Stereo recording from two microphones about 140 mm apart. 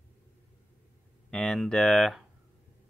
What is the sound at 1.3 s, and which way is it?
Speech, 5° left (ahead or behind).